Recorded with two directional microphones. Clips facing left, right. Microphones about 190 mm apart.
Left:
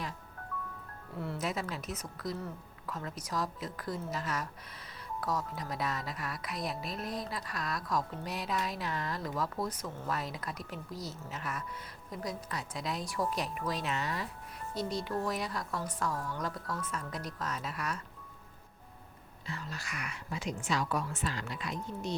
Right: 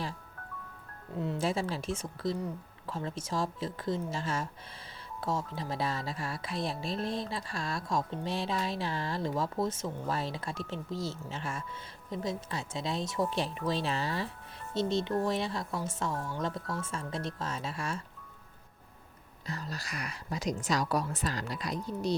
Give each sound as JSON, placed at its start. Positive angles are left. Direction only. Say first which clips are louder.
{"t": 1.1, "sound": "speech", "louder": "right 5 dB", "side_deg": -20}
{"t": 1.5, "sound": "speech", "louder": "right 5 dB", "side_deg": -30}
{"t": 19.5, "sound": "a woman's voice", "louder": "right 3 dB", "side_deg": -40}